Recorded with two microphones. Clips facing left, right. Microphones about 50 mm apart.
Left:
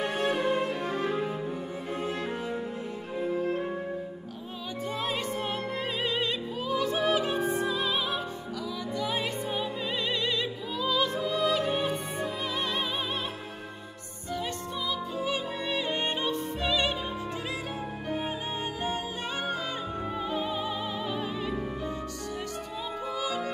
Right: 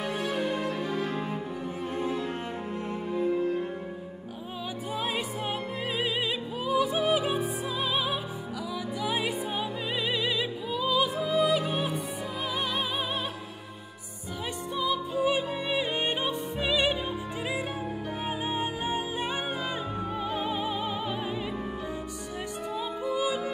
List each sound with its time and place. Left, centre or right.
0.0 s music: left
4.9 s opera: centre
14.8 s music: centre
18.2 s music: centre
20.2 s music: centre
23.1 s yodeling: centre